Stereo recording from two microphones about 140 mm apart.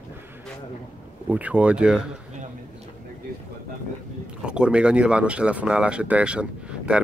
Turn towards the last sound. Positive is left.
turn(degrees=-5)  # may be behind; listen again after turning